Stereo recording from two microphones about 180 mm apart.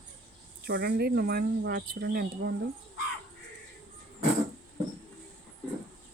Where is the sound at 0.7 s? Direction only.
60° right (ahead or behind).